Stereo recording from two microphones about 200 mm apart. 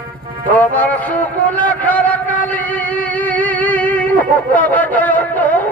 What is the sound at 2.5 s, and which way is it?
Music, 10° left (ahead or behind).